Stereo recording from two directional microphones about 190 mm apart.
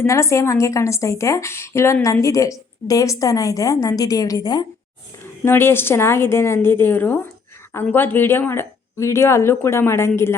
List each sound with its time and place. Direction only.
0.0 s speech: 15° left (ahead or behind)